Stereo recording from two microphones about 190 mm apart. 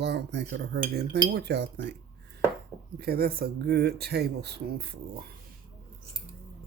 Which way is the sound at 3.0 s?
55° right (ahead or behind).